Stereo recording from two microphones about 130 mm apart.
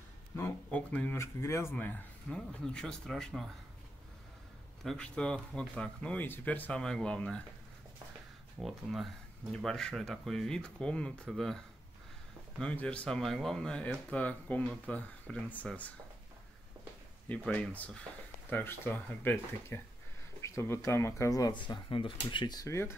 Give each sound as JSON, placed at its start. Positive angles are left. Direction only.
{"t": 0.7, "sound": "speech", "side_deg": 10}
{"t": 1.1, "sound": "speech", "side_deg": 20}
{"t": 4.8, "sound": "speech", "side_deg": 10}
{"t": 8.5, "sound": "speech", "side_deg": 0}
{"t": 17.3, "sound": "speech", "side_deg": 10}